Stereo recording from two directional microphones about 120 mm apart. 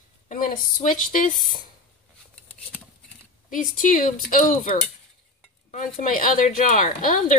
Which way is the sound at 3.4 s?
90° left.